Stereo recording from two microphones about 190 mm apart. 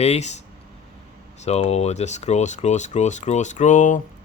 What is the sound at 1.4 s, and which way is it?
Speech, 35° left (ahead or behind).